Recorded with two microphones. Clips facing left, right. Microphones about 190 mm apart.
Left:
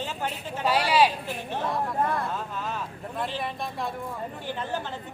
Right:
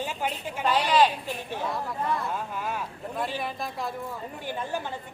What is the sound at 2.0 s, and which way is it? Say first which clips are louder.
Speech: right 1 dB; 55° left (ahead or behind).